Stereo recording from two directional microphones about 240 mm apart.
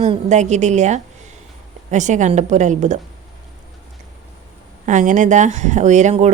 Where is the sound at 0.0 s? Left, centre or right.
Right.